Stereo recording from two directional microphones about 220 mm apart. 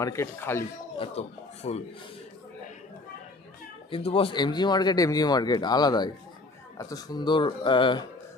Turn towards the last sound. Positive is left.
turn(degrees=20)  # may be behind; listen again after turning